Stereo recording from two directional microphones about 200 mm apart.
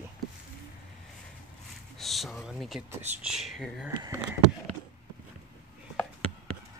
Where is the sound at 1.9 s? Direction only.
Centre (ahead or behind).